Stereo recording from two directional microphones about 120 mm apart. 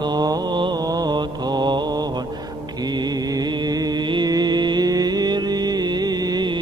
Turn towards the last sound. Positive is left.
turn(degrees=-35)  # may be behind; listen again after turning